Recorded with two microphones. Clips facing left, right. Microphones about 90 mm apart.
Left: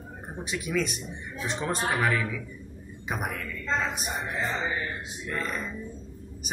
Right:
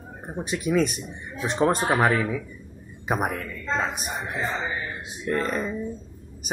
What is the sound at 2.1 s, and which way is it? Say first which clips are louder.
Speech: right 5 dB; 30° right (ahead or behind).